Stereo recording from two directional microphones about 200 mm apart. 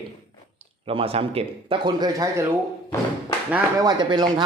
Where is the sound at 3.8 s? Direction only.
20° right (ahead or behind).